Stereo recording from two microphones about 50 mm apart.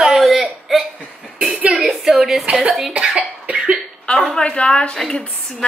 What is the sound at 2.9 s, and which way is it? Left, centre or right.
Cough, right.